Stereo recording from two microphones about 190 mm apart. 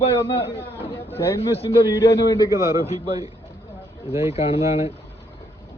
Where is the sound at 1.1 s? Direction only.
15° left (ahead or behind).